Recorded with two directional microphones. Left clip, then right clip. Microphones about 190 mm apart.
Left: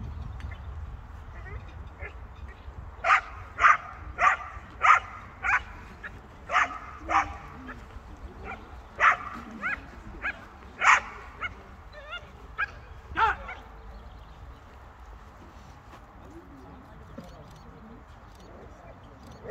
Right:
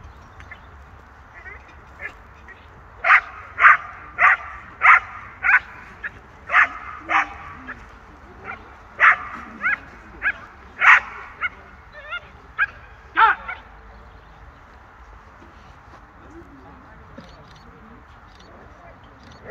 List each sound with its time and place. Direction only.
3.0 s dog: 25° left (ahead or behind)
6.0 s bow-wow: 25° left (ahead or behind)
8.5 s dog: 15° left (ahead or behind)
13.1 s a sound: 90° left